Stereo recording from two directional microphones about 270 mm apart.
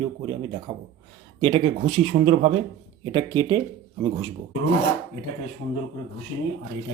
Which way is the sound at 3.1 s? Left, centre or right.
Centre.